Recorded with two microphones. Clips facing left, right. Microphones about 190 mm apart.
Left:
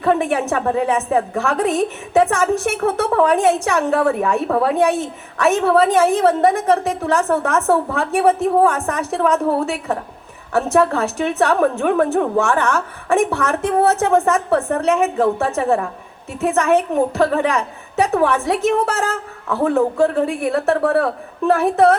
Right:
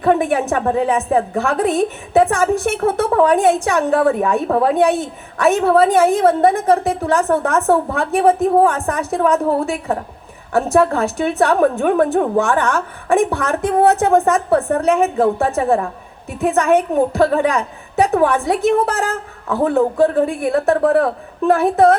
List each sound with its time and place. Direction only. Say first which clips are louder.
0.0 s a woman's voice: right 2 dB; 35° right (ahead or behind)